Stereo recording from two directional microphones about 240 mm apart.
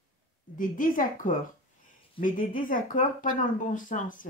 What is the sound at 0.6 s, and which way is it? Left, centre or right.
Speech, left.